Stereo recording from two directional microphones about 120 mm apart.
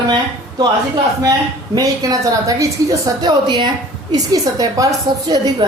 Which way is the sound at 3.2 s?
40° right (ahead or behind).